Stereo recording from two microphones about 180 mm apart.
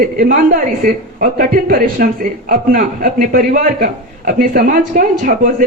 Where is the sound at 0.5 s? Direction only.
50° right (ahead or behind).